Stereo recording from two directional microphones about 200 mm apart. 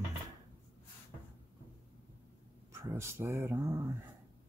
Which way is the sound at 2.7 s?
15° right (ahead or behind).